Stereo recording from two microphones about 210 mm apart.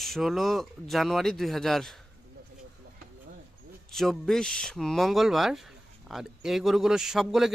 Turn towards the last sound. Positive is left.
turn(degrees=0)  # may be behind; listen again after turning